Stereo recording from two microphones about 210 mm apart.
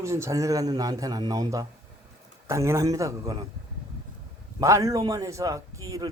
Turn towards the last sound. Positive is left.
turn(degrees=-15)  # may be behind; listen again after turning